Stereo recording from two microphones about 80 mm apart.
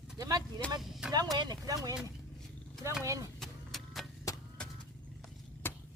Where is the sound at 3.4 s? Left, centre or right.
Centre.